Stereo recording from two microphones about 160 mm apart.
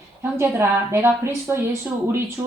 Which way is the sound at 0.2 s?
15° right (ahead or behind).